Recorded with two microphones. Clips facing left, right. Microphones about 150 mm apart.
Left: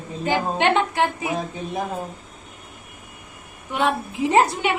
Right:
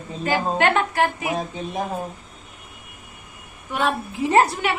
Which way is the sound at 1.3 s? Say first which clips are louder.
Even; centre (ahead or behind).